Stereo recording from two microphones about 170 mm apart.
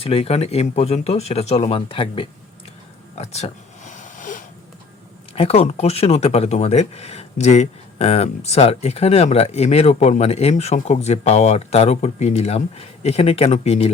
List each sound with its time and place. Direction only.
0.0 s speech: 35° left (ahead or behind)
3.2 s a sound: 40° left (ahead or behind)
5.3 s speech: 35° left (ahead or behind)